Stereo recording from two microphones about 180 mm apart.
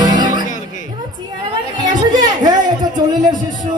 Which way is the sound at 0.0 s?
25° right (ahead or behind).